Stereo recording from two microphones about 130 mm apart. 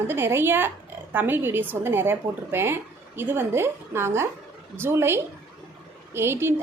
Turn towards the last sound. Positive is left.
turn(degrees=-20)  # may be behind; listen again after turning